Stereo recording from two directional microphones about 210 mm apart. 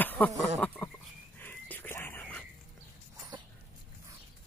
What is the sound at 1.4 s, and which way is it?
Whispering, 10° left (ahead or behind).